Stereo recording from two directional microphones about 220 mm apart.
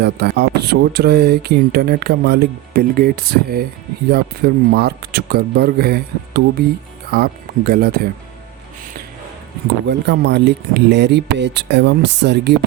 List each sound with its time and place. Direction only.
0.0 s speech: 45° right (ahead or behind)
9.8 s speech: 50° right (ahead or behind)